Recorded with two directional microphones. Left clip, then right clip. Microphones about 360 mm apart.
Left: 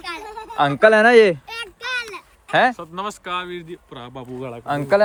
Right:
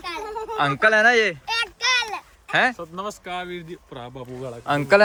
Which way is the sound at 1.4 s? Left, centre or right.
Right.